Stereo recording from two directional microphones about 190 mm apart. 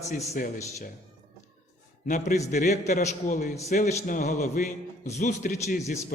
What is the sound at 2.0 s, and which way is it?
A man's voice, 40° left (ahead or behind).